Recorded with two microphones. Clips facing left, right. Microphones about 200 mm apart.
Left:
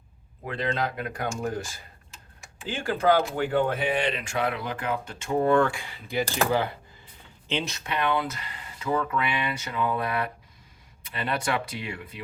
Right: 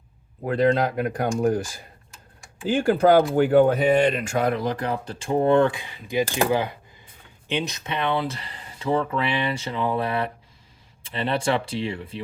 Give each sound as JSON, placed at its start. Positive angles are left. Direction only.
{"t": 0.4, "sound": "speech", "side_deg": -45}
{"t": 2.8, "sound": "speech", "side_deg": -35}